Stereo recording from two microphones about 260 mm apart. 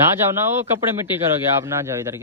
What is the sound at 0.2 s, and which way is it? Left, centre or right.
A man's voice, centre.